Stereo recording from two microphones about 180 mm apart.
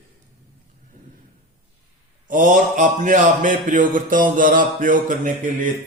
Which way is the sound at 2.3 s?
45° right (ahead or behind).